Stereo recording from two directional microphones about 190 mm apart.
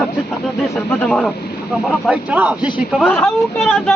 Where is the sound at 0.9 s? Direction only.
5° left (ahead or behind).